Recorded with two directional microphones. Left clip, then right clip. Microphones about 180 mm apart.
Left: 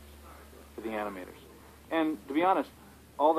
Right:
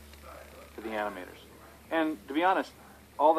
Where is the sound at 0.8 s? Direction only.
25° left (ahead or behind).